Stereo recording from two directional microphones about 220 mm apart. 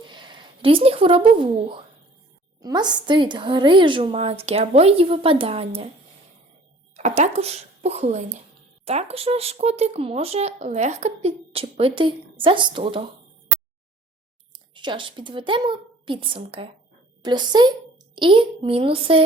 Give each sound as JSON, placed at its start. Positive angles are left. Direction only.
{"t": 0.0, "sound": "a sound", "side_deg": -20}
{"t": 2.6, "sound": "speech", "side_deg": -20}
{"t": 6.9, "sound": "speech", "side_deg": -30}
{"t": 14.5, "sound": "a woman's voice", "side_deg": -20}